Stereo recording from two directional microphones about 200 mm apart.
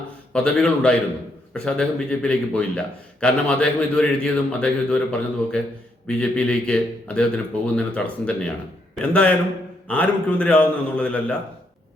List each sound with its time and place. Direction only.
0.3 s a man's voice: 5° left (ahead or behind)